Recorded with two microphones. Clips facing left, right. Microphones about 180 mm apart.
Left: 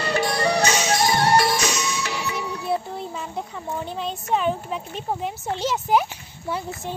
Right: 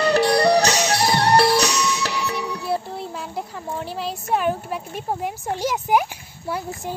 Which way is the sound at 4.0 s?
5° right (ahead or behind).